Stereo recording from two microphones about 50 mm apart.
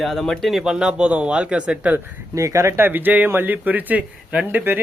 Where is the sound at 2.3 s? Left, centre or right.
Right.